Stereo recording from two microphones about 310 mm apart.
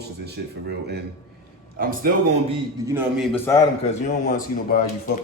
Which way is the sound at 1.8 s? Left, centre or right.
Right.